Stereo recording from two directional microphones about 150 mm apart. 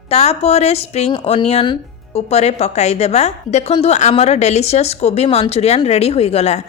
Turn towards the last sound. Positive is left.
turn(degrees=45)  # may be behind; listen again after turning